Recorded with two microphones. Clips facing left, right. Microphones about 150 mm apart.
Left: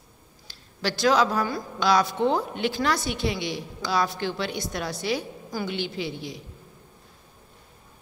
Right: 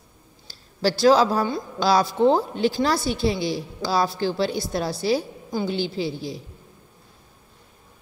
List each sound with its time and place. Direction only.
0.5 s a woman's voice: 35° right (ahead or behind)